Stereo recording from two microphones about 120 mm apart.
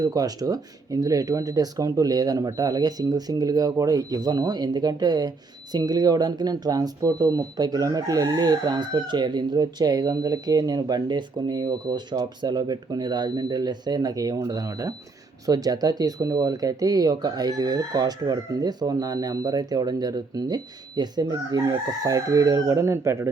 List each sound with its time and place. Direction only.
0.0 s speech: 30° right (ahead or behind)